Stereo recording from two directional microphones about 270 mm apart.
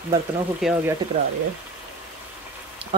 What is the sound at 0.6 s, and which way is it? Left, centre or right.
Speech, centre.